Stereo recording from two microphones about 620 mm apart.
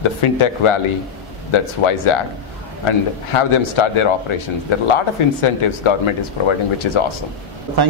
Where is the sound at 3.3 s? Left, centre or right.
Left.